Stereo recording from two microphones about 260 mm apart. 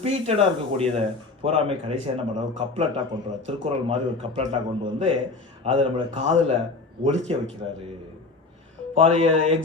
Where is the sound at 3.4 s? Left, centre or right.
Right.